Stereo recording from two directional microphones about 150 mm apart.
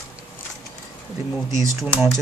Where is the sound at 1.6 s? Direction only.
10° right (ahead or behind).